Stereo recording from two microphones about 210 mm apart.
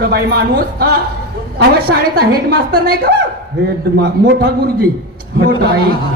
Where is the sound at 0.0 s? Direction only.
50° right (ahead or behind).